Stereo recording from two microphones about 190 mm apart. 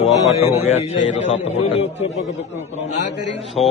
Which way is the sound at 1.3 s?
30° left (ahead or behind).